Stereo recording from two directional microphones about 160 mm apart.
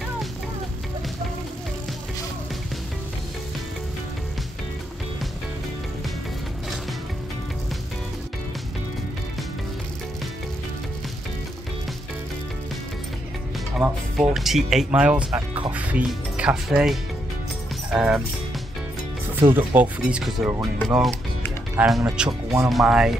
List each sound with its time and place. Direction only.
13.7 s speech: centre (ahead or behind)
19.5 s speech: 10° right (ahead or behind)